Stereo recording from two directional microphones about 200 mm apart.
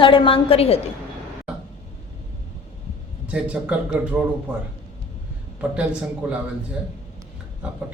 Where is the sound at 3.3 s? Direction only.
5° right (ahead or behind).